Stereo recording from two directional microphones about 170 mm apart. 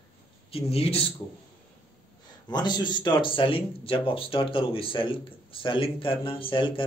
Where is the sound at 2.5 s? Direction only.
25° left (ahead or behind).